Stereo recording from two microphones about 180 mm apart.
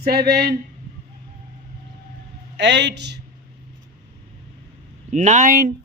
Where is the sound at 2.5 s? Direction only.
75° right (ahead or behind).